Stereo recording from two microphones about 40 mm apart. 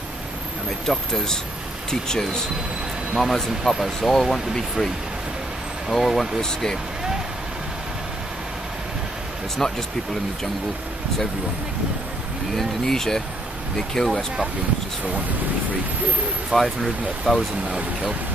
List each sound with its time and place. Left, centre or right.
0.7 s speech: centre
3.2 s speech: centre
4.1 s speech: centre
6.4 s speech: centre
9.6 s speech: centre
12.5 s speech: centre
16.5 s speech: centre